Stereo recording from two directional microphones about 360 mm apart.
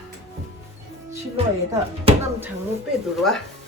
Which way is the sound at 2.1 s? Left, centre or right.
Centre.